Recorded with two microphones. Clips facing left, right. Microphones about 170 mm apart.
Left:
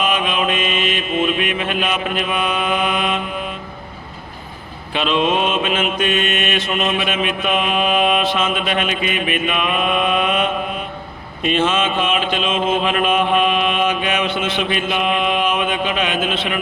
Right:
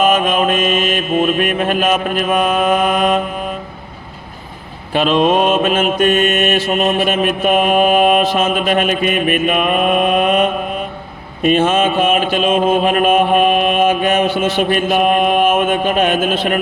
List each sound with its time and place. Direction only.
0.0 s mantra: 45° right (ahead or behind)
4.9 s mantra: 45° right (ahead or behind)